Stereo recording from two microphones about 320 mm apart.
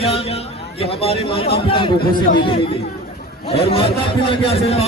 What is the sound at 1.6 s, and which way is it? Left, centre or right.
A man's voice, centre.